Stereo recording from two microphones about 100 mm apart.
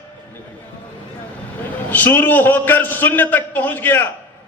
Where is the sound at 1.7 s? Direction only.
20° left (ahead or behind).